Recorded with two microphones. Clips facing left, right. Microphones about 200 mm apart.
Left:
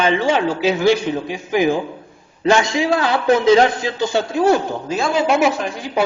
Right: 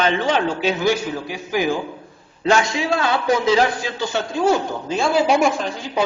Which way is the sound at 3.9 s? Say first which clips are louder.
Left 5 dB; 20° left (ahead or behind).